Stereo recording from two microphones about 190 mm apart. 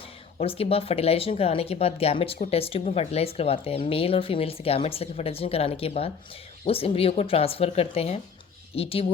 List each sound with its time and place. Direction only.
0.3 s speech: 30° left (ahead or behind)